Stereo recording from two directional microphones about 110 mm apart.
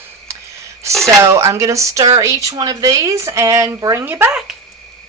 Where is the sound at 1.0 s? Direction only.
30° right (ahead or behind).